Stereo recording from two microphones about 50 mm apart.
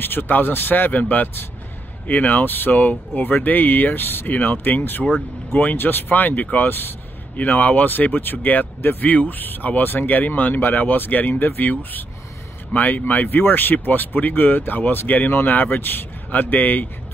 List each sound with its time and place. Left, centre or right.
0.0 s speech: left
7.3 s speech: left